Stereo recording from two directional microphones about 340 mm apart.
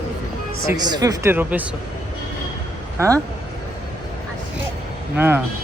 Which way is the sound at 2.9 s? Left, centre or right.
Centre.